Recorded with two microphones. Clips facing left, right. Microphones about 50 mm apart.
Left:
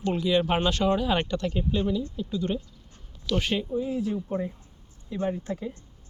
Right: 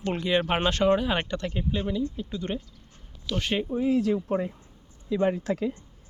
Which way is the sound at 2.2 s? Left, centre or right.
Right.